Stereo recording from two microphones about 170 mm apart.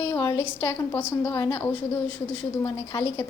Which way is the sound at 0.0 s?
15° left (ahead or behind).